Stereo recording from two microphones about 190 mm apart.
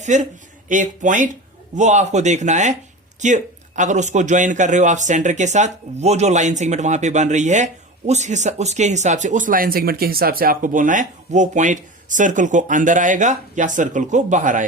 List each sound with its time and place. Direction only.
0.0 s a man's voice: 40° right (ahead or behind)